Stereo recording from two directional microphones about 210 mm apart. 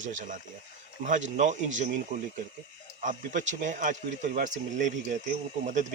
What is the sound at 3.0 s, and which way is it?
Speech, 35° right (ahead or behind).